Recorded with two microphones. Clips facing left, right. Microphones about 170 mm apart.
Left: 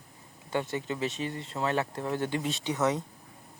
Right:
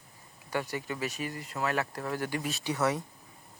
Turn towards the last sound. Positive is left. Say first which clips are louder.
# left 1 dB
turn(degrees=20)  # may be behind; listen again after turning